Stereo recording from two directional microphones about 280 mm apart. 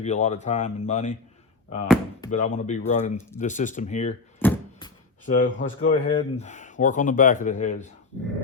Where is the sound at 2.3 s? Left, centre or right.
Left.